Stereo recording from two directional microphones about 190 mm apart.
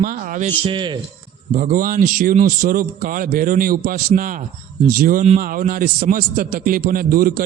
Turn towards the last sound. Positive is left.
turn(degrees=-50)  # may be behind; listen again after turning